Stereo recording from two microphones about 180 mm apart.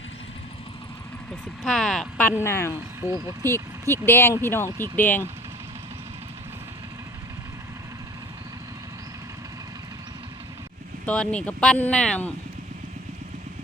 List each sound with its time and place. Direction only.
1.6 s speech: 5° left (ahead or behind)
11.0 s speech: 5° left (ahead or behind)